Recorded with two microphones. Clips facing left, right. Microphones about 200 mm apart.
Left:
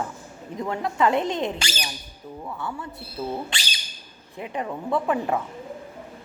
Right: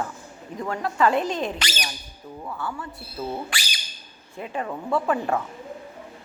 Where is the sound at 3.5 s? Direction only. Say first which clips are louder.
Even; 25° left (ahead or behind).